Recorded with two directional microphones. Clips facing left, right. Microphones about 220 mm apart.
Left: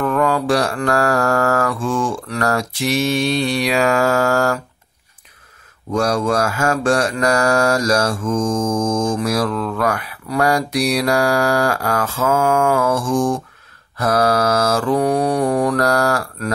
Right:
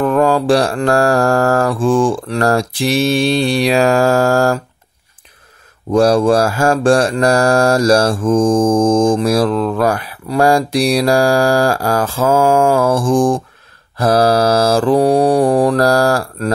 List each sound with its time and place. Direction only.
0.0 s mantra: 30° right (ahead or behind)
5.9 s mantra: 30° right (ahead or behind)